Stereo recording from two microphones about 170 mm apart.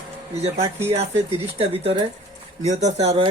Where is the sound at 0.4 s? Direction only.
40° right (ahead or behind).